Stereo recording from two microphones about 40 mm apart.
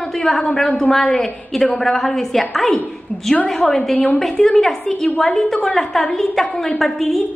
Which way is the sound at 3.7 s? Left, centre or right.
Centre.